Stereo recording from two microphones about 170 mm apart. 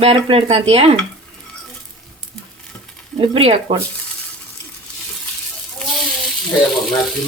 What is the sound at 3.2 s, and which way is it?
Speech, 30° right (ahead or behind).